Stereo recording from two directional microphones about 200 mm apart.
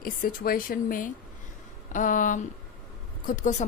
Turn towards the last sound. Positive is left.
turn(degrees=40)  # may be behind; listen again after turning